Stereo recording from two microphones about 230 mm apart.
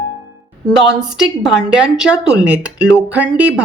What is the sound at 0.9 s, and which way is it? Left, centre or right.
Speech, centre.